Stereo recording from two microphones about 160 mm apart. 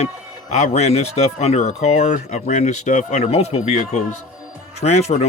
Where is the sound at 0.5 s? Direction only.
45° left (ahead or behind).